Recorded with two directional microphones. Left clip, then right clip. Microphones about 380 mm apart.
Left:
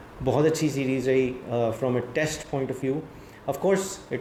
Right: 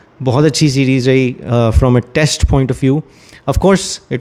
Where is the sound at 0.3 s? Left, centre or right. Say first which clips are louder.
Right 10 dB; right.